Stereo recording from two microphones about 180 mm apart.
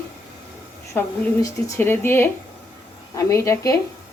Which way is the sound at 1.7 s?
10° left (ahead or behind).